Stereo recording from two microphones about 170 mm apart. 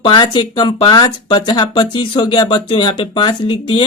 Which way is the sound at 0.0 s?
30° left (ahead or behind).